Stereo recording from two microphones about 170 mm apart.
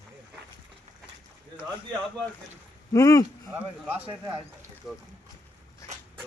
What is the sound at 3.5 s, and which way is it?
Speech, 10° right (ahead or behind).